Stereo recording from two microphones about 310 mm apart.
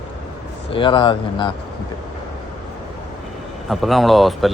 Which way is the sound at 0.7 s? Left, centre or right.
Centre.